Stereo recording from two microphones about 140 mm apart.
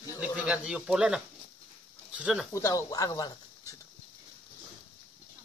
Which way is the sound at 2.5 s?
25° left (ahead or behind).